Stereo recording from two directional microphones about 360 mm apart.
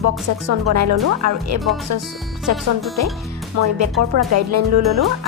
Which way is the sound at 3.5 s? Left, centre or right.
Right.